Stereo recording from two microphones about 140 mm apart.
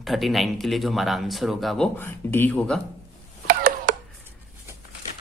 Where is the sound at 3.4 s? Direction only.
90° right.